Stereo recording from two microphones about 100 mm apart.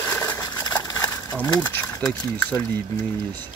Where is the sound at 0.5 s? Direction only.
45° left (ahead or behind).